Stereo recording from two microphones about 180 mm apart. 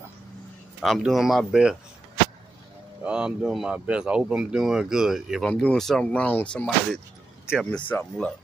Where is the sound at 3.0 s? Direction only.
5° right (ahead or behind).